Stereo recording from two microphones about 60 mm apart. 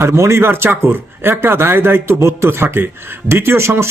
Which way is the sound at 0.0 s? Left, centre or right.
Right.